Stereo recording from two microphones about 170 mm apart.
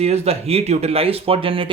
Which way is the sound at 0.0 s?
40° right (ahead or behind).